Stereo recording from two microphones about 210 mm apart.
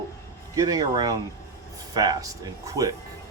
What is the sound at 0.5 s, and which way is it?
Speech, 15° right (ahead or behind).